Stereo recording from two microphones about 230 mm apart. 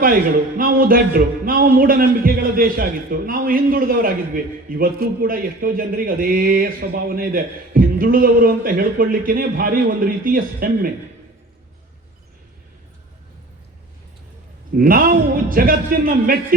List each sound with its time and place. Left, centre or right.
0.0 s speech: right
14.8 s speech: right